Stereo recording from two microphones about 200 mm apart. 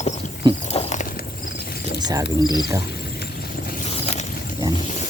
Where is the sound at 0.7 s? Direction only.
35° left (ahead or behind).